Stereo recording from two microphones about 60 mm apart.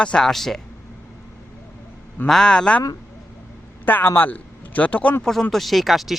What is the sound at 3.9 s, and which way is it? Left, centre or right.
A man's voice, left.